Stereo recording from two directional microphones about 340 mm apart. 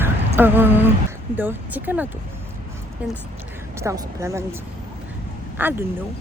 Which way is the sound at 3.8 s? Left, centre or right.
Centre.